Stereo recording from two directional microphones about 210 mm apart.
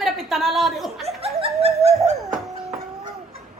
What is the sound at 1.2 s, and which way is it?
Laughter, 30° right (ahead or behind).